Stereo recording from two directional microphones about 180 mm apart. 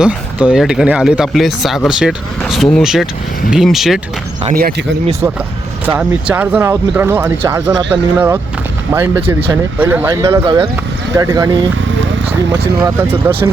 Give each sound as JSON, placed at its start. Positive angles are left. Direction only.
{"t": 0.0, "sound": "speech", "side_deg": -5}
{"t": 5.8, "sound": "speech", "side_deg": -5}
{"t": 12.8, "sound": "speech", "side_deg": -15}